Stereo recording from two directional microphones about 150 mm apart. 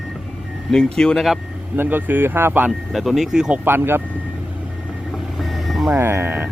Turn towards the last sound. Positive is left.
turn(degrees=-15)  # may be behind; listen again after turning